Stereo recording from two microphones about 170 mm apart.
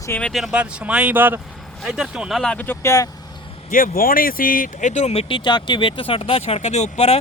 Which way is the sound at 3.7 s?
55° left (ahead or behind).